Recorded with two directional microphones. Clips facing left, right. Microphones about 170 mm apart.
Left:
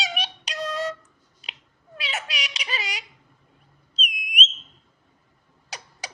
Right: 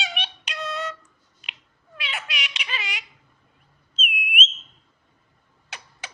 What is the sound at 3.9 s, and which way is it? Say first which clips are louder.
Whistle: right 3 dB; 40° left (ahead or behind).